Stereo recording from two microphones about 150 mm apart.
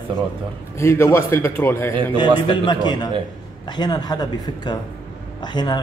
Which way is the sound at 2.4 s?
30° left (ahead or behind).